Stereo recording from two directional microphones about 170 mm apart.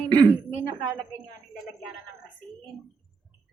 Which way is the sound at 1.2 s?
5° right (ahead or behind).